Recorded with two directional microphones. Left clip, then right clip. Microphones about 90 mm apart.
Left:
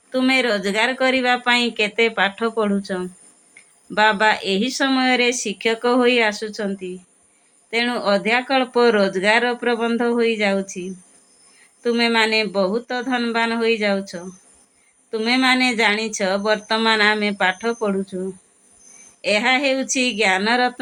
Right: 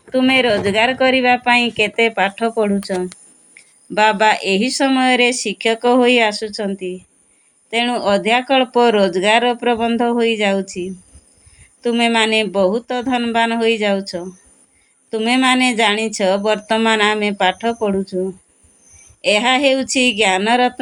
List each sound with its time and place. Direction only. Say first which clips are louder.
0.1 s speech: right 4 dB; 30° right (ahead or behind); by 20.7 s 55° right (ahead or behind)